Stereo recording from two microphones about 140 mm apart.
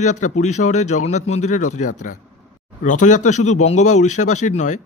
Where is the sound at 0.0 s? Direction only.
60° left (ahead or behind).